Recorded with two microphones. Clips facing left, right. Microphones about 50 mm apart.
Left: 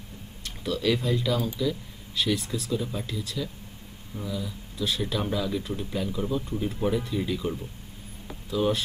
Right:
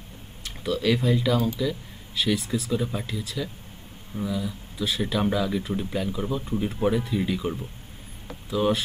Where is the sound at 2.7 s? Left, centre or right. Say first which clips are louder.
Even; centre.